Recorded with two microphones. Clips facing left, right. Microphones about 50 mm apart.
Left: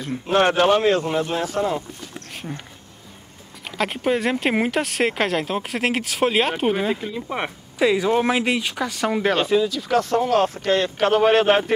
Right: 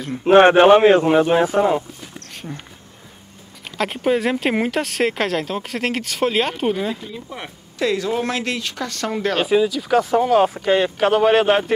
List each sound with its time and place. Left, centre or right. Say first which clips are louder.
0.3 s speech: right 7 dB; right
2.4 s speech: even; centre
3.6 s speech: right 2 dB; centre
7.2 s speech: left 6 dB; left
7.8 s speech: left 2 dB; centre
9.4 s speech: right 2 dB; centre